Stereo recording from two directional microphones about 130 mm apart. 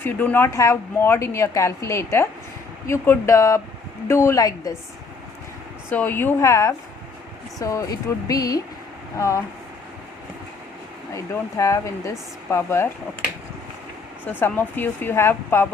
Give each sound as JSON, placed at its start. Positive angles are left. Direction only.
{"t": 0.0, "sound": "a woman's voice", "side_deg": 15}
{"t": 5.9, "sound": "a woman's voice", "side_deg": 15}
{"t": 11.1, "sound": "a woman's voice", "side_deg": 25}
{"t": 14.3, "sound": "a woman's voice", "side_deg": 15}